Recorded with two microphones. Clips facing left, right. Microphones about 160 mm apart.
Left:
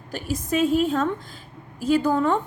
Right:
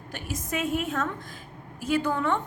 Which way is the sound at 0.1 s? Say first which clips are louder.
Left 7 dB; 35° left (ahead or behind).